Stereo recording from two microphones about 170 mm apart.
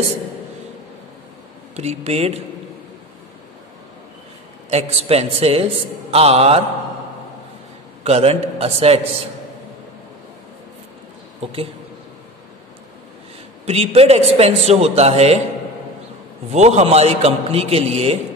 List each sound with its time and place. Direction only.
1.8 s a man's voice: 40° right (ahead or behind)
4.6 s a man's voice: 35° right (ahead or behind)
8.0 s a man's voice: 35° right (ahead or behind)
13.7 s a man's voice: 35° right (ahead or behind)
16.4 s a man's voice: 40° right (ahead or behind)